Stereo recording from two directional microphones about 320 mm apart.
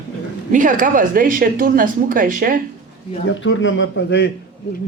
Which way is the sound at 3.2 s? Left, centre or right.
Left.